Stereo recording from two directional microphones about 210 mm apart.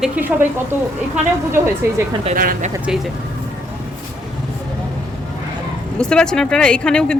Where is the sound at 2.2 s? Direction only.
45° right (ahead or behind).